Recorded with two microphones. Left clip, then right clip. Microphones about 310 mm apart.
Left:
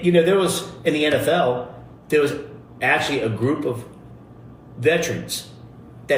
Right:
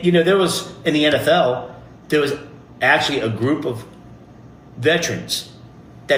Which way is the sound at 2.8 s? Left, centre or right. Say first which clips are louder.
Right 4 dB; right.